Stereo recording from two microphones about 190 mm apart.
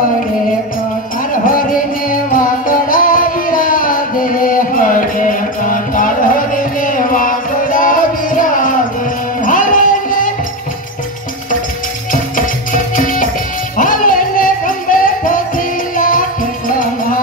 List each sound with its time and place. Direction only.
1.3 s music: 45° left (ahead or behind)
12.1 s music: 45° left (ahead or behind)